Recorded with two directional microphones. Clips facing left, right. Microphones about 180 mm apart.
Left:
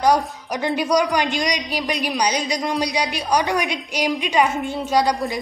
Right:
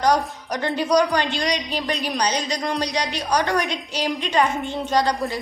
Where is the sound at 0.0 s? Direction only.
10° left (ahead or behind).